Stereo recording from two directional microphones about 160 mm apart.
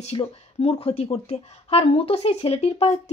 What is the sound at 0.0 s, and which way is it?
A woman's voice, 40° left (ahead or behind).